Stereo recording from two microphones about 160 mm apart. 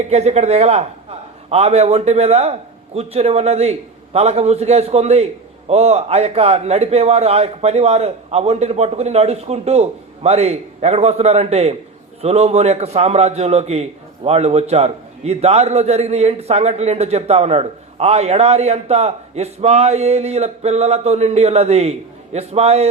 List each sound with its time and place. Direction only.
0.1 s a man's voice: 40° right (ahead or behind)